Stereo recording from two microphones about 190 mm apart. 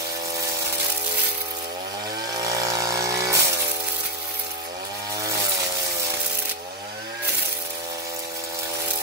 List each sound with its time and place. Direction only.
2.5 s pump: 15° right (ahead or behind)